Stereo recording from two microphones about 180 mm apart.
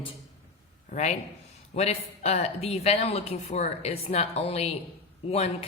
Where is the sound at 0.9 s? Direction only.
40° left (ahead or behind).